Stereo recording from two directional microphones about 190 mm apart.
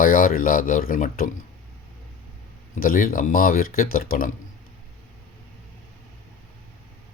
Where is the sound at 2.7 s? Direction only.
45° left (ahead or behind).